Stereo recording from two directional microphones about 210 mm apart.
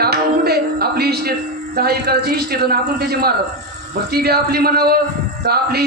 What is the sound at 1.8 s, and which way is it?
A man's voice, 50° right (ahead or behind).